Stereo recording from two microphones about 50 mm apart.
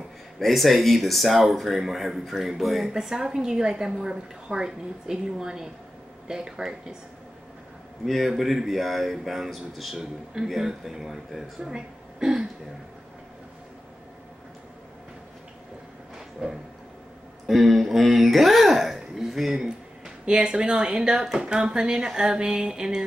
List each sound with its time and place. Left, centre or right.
0.4 s a woman's voice: centre
8.0 s a woman's voice: centre
16.4 s a woman's voice: centre
17.5 s a woman's voice: centre